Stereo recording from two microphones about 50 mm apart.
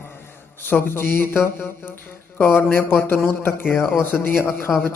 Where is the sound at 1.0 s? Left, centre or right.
Left.